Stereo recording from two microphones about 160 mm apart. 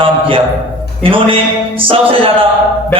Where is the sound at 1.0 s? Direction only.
35° right (ahead or behind).